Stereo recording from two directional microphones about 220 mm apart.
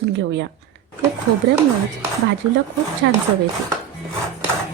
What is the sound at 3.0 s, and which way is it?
Speech, 50° right (ahead or behind).